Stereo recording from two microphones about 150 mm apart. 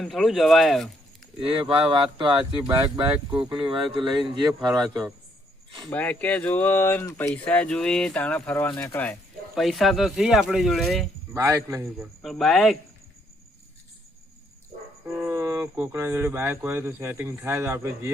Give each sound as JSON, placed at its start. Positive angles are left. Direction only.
{"t": 0.0, "sound": "speech", "side_deg": 0}
{"t": 1.4, "sound": "speech", "side_deg": -35}
{"t": 5.9, "sound": "speech", "side_deg": 10}
{"t": 7.4, "sound": "speech", "side_deg": 10}
{"t": 11.3, "sound": "a man's voice", "side_deg": -20}
{"t": 11.9, "sound": "speech", "side_deg": 0}
{"t": 15.0, "sound": "speech", "side_deg": -15}